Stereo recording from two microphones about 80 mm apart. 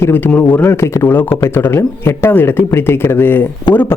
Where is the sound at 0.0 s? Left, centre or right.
Left.